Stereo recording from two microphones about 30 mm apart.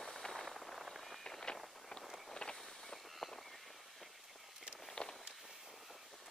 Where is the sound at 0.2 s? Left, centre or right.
Centre.